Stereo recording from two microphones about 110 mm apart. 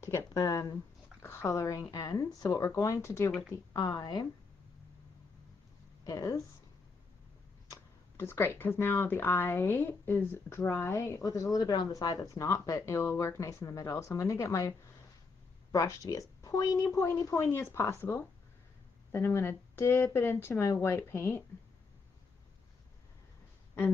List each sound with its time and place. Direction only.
0.0 s speech: 25° left (ahead or behind)
0.4 s speech: 35° left (ahead or behind)
3.3 s speech: 5° left (ahead or behind)
3.5 s speech: 35° left (ahead or behind)
6.0 s a woman's voice: 30° left (ahead or behind)
7.7 s speech: 25° left (ahead or behind)